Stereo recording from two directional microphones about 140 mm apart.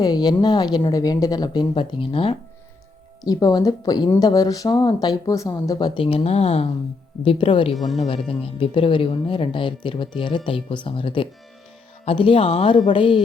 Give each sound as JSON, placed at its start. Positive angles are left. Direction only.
{"t": 0.0, "sound": "speech", "side_deg": 30}
{"t": 3.2, "sound": "speech", "side_deg": 25}
{"t": 7.2, "sound": "speech", "side_deg": 35}
{"t": 7.8, "sound": "speech", "side_deg": 0}
{"t": 8.1, "sound": "speech", "side_deg": 40}